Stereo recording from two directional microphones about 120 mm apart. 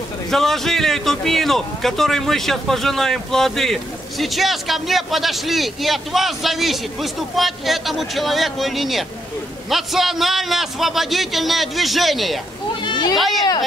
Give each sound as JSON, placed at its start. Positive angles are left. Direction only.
{"t": 0.3, "sound": "a man's voice", "side_deg": 5}
{"t": 12.8, "sound": "a sound", "side_deg": 40}
{"t": 13.1, "sound": "a man's voice", "side_deg": 0}